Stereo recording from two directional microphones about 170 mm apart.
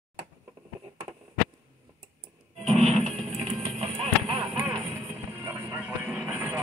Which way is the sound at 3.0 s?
40° right (ahead or behind).